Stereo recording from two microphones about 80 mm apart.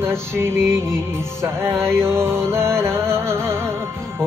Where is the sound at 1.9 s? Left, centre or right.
Right.